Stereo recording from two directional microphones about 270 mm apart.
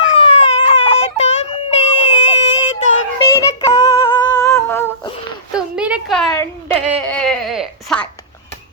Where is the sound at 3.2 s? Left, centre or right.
Centre.